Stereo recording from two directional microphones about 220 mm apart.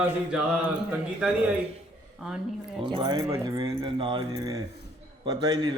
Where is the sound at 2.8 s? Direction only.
20° right (ahead or behind).